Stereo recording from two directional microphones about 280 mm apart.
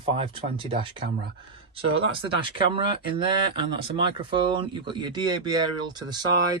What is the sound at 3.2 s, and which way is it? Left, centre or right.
Speech, centre.